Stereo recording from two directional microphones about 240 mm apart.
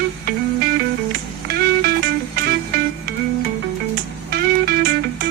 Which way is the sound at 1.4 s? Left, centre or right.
Right.